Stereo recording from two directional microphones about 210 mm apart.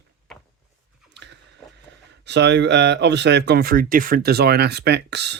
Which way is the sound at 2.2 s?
55° right (ahead or behind).